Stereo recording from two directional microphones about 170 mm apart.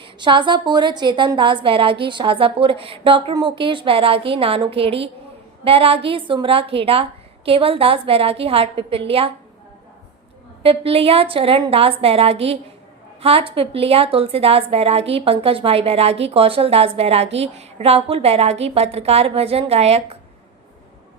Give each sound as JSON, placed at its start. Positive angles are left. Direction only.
{"t": 0.0, "sound": "a woman's voice", "side_deg": -30}
{"t": 10.6, "sound": "a woman's voice", "side_deg": -35}